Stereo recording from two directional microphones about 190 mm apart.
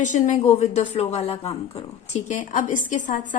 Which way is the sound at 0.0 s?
40° left (ahead or behind).